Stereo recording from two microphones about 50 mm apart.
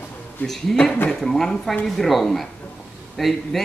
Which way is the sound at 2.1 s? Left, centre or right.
Centre.